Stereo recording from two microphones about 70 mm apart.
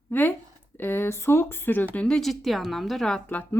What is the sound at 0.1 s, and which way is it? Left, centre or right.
Speech, left.